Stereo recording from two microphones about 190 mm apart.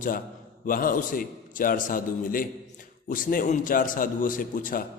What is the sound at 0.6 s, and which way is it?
A man's voice, 45° left (ahead or behind).